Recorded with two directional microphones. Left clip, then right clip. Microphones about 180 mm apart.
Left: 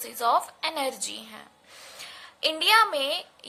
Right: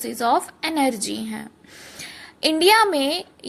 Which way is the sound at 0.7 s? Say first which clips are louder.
Right 10 dB; centre (ahead or behind).